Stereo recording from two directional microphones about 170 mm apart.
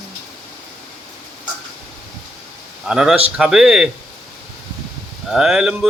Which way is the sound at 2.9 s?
5° right (ahead or behind).